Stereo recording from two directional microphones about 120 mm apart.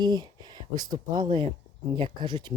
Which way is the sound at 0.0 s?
35° right (ahead or behind).